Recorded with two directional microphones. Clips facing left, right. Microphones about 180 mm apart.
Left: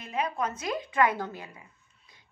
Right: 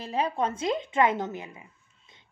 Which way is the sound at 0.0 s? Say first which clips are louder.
Right 3 dB; 30° right (ahead or behind).